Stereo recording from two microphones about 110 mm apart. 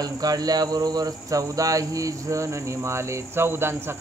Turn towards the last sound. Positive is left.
turn(degrees=-20)  # may be behind; listen again after turning